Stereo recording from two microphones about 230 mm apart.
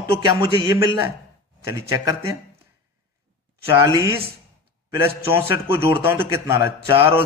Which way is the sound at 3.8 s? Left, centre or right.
Centre.